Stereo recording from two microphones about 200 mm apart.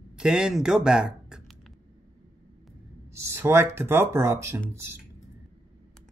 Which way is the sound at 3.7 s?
10° right (ahead or behind).